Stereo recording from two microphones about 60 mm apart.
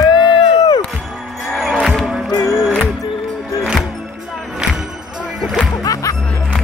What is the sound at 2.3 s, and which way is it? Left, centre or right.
Music, left.